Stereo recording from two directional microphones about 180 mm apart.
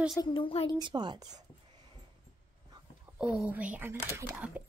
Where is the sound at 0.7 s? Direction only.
25° right (ahead or behind).